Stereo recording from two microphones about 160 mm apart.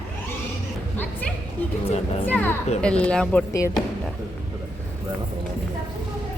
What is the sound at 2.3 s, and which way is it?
Speech, 10° left (ahead or behind).